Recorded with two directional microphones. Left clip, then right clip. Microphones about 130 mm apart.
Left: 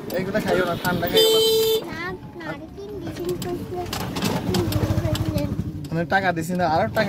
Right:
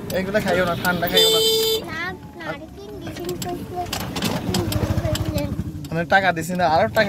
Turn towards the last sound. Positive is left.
turn(degrees=10)  # may be behind; listen again after turning